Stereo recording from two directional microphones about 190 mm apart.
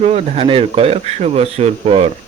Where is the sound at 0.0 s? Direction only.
35° right (ahead or behind).